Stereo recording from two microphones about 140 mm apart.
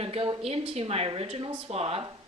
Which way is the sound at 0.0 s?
45° right (ahead or behind).